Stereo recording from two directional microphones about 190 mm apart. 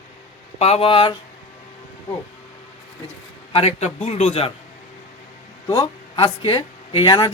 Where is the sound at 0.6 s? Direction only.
35° left (ahead or behind).